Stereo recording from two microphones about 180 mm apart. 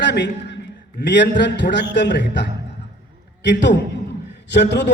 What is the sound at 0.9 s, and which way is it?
A man's voice, 70° left (ahead or behind).